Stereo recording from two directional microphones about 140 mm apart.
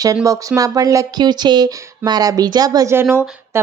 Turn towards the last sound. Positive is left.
turn(degrees=-15)  # may be behind; listen again after turning